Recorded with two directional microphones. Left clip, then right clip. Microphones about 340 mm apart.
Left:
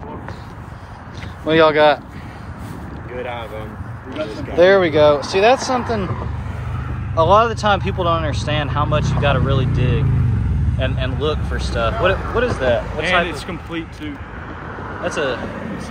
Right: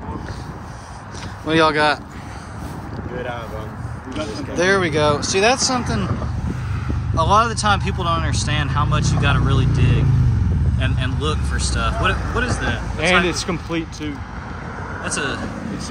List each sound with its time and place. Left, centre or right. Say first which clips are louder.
1.4 s speech: left 4 dB; centre
4.6 s speech: left 6 dB; centre
7.2 s speech: left 3 dB; centre
13.3 s speech: right 3 dB; right